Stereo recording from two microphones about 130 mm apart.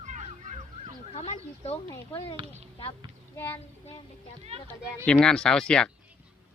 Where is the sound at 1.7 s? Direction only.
20° left (ahead or behind).